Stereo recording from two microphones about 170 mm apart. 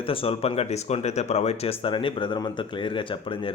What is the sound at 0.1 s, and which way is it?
Speech, 35° left (ahead or behind).